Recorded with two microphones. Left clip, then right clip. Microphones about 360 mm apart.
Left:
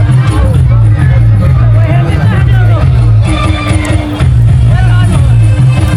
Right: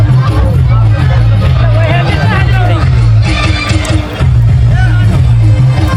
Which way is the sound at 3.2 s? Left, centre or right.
Centre.